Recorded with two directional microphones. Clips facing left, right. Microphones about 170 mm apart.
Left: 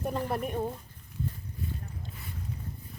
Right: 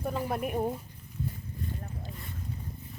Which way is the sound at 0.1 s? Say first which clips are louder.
Right 1 dB; 5° right (ahead or behind).